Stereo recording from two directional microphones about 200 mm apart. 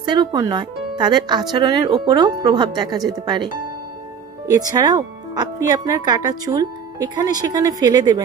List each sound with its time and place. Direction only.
0.0 s speech: 20° right (ahead or behind)